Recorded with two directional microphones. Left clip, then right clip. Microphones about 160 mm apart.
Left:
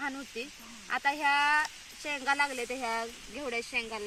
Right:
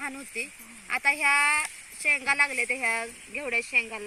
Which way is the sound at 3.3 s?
Centre (ahead or behind).